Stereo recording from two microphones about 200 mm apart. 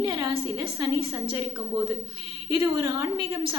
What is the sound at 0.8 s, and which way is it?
A woman's voice, 20° right (ahead or behind).